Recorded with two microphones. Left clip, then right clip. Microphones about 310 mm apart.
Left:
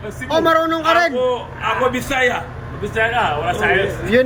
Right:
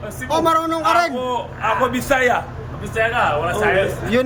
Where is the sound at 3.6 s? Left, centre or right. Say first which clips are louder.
Left 2 dB; centre.